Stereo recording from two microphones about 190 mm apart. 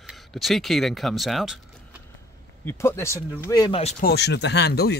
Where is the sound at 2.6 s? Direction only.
15° left (ahead or behind).